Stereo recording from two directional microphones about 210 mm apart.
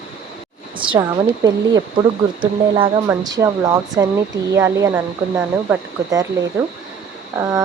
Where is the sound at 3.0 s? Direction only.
15° right (ahead or behind).